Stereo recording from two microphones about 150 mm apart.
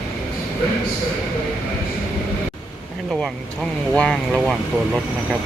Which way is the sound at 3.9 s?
5° left (ahead or behind).